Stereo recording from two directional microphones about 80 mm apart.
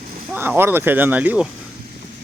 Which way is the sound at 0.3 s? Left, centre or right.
Right.